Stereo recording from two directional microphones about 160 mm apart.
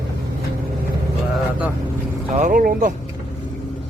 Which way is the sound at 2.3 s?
55° right (ahead or behind).